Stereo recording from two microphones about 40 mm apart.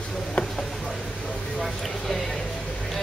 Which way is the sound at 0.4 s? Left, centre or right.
Left.